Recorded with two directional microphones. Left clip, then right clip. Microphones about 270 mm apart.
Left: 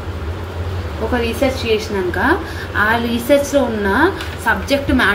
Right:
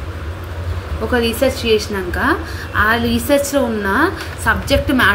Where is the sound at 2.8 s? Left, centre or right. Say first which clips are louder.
Right 1 dB; right.